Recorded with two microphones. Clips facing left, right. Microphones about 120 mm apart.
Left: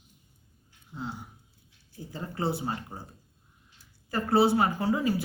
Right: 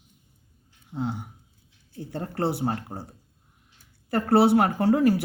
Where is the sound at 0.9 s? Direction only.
70° right (ahead or behind).